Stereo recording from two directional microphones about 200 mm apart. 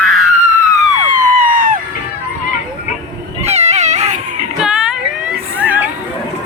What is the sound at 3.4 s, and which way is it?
Cat, 35° right (ahead or behind).